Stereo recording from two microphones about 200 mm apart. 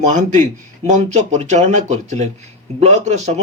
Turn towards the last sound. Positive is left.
turn(degrees=-35)  # may be behind; listen again after turning